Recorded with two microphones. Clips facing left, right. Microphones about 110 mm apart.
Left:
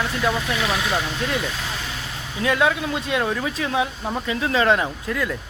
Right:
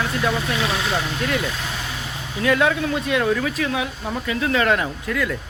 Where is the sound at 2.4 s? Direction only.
20° left (ahead or behind).